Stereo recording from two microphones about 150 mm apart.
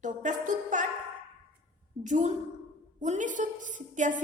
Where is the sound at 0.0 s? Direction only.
55° right (ahead or behind).